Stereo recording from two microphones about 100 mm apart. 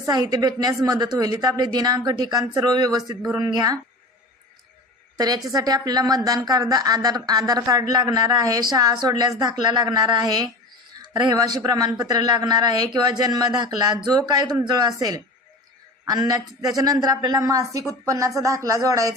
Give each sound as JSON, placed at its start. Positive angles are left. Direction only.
{"t": 0.1, "sound": "a woman's voice", "side_deg": -40}
{"t": 3.2, "sound": "speech", "side_deg": -10}
{"t": 3.5, "sound": "a woman's voice", "side_deg": -40}
{"t": 5.1, "sound": "a woman's voice", "side_deg": -40}